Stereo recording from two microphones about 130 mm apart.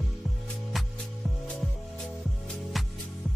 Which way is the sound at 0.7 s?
Centre (ahead or behind).